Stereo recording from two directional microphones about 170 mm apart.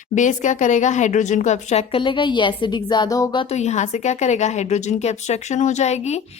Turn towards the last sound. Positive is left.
turn(degrees=40)  # may be behind; listen again after turning